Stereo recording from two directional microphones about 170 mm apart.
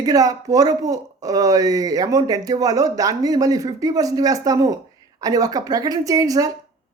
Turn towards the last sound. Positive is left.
turn(degrees=-20)  # may be behind; listen again after turning